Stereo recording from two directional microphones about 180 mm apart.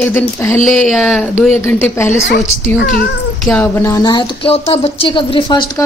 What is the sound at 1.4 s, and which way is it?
Speech, 10° left (ahead or behind).